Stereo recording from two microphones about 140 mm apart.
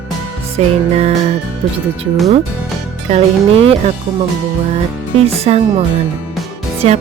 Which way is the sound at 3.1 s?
45° right (ahead or behind).